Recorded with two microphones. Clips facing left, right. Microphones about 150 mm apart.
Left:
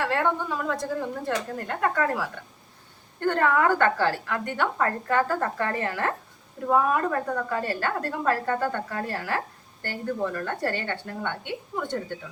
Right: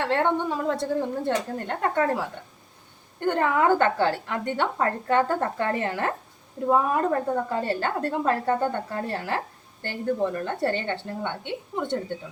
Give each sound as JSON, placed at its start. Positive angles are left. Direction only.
{"t": 0.0, "sound": "a woman's voice", "side_deg": -25}
{"t": 3.2, "sound": "a woman's voice", "side_deg": -15}